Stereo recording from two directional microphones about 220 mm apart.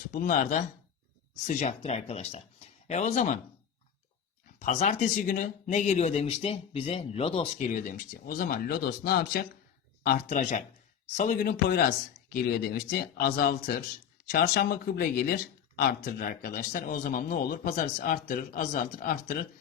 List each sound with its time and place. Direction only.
0.1 s speech: 35° left (ahead or behind)
4.6 s speech: 35° left (ahead or behind)